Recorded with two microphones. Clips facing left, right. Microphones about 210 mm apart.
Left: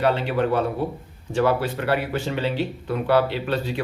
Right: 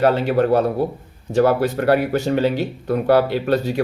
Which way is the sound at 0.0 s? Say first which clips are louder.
Right 5 dB; 45° right (ahead or behind).